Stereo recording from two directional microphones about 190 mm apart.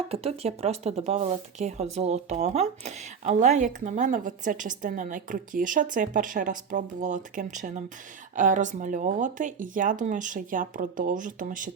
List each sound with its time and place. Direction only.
0.1 s speech: 30° right (ahead or behind)